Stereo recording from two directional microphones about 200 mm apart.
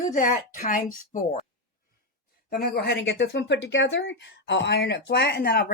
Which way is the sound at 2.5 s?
55° left (ahead or behind).